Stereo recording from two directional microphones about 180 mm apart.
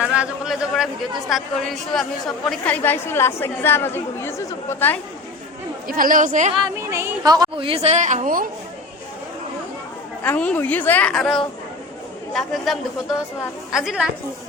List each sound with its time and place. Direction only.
0.0 s a man's voice: 5° right (ahead or behind); by 4.9 s 15° left (ahead or behind)
5.9 s a woman's voice: 50° right (ahead or behind)
6.7 s a woman's voice: 15° right (ahead or behind); by 8.4 s 45° right (ahead or behind)
10.2 s a woman's voice: 10° left (ahead or behind)